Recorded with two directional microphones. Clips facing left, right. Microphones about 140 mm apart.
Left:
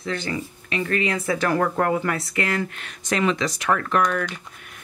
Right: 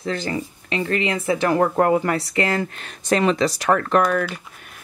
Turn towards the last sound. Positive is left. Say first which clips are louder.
# right 4 dB
turn(degrees=-35)  # may be behind; listen again after turning